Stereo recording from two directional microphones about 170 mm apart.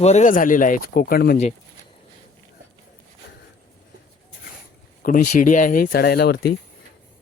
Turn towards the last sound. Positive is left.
turn(degrees=65)  # may be behind; listen again after turning